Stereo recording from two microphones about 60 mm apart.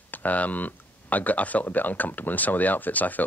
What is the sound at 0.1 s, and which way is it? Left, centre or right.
Speech, left.